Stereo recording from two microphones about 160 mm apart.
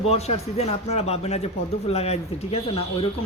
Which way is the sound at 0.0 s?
40° left (ahead or behind).